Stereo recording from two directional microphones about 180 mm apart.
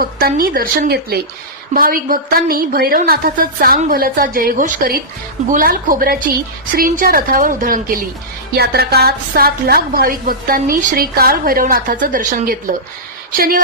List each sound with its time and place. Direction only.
0.0 s a woman's voice: 55° right (ahead or behind)
8.5 s a woman's voice: 60° right (ahead or behind)